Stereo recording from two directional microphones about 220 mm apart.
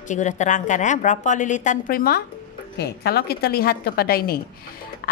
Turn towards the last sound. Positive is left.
turn(degrees=45)  # may be behind; listen again after turning